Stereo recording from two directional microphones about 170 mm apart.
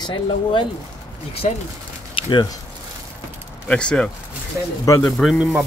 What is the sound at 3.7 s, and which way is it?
A man's voice, 5° left (ahead or behind).